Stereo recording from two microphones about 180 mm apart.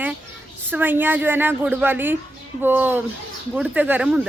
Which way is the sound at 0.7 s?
10° right (ahead or behind).